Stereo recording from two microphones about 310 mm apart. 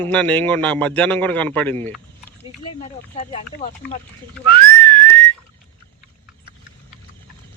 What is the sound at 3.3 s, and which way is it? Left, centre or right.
Speech, left.